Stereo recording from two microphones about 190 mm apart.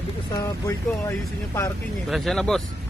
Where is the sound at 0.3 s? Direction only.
15° left (ahead or behind).